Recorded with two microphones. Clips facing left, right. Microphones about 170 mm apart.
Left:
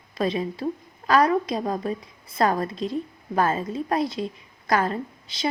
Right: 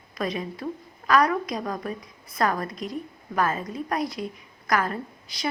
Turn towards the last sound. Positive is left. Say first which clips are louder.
# left 4 dB
turn(degrees=25)  # may be behind; listen again after turning